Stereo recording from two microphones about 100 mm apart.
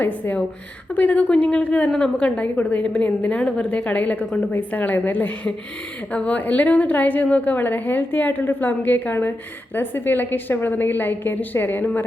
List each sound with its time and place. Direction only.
0.9 s a woman's voice: 15° left (ahead or behind)